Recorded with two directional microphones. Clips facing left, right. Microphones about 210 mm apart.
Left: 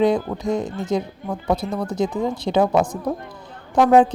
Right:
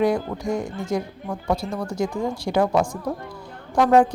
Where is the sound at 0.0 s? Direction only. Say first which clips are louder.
Left 3 dB; 20° left (ahead or behind).